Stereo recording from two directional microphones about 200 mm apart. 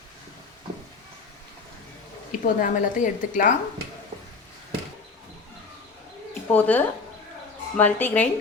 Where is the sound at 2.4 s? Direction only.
40° left (ahead or behind).